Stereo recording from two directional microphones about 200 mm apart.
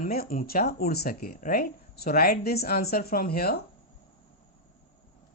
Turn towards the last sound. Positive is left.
turn(degrees=50)  # may be behind; listen again after turning